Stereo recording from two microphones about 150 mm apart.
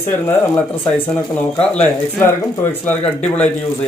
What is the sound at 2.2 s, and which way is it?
Speech, 15° left (ahead or behind).